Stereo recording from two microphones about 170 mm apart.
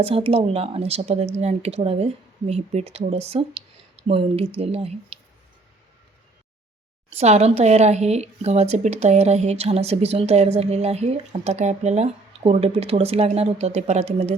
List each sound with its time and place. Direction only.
0.0 s a woman's voice: 35° right (ahead or behind)
7.2 s a woman's voice: 40° right (ahead or behind)